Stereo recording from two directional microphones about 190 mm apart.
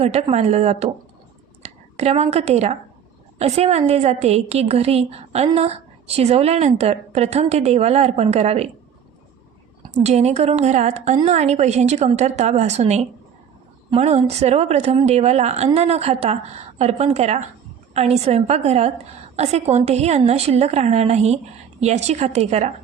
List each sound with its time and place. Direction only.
0.0 s a woman's voice: 35° right (ahead or behind)
10.0 s a woman's voice: 35° right (ahead or behind)